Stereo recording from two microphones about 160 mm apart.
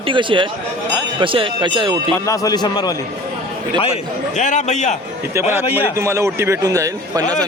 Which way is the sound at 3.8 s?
45° left (ahead or behind).